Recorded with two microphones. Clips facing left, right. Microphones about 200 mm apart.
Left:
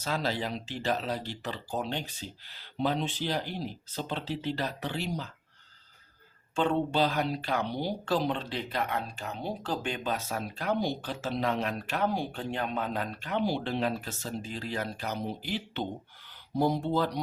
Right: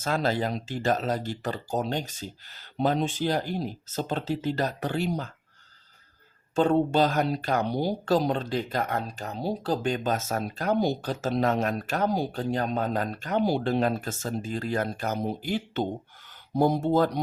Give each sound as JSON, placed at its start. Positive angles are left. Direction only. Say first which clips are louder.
{"t": 0.0, "sound": "speech", "louder": "right 5 dB", "side_deg": -50}
{"t": 6.6, "sound": "speech", "louder": "right 5 dB", "side_deg": -45}